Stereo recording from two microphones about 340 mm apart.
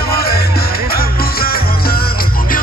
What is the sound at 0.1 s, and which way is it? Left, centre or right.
Music, left.